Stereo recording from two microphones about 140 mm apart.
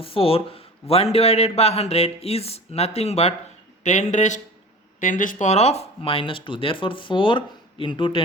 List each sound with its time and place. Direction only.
0.0 s a man's voice: 40° left (ahead or behind); by 4.4 s 60° left (ahead or behind)
4.9 s speech: 70° left (ahead or behind); by 8.2 s 35° left (ahead or behind)